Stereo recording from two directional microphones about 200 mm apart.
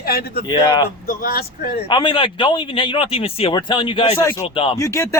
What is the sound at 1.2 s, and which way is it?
Speech, 50° left (ahead or behind).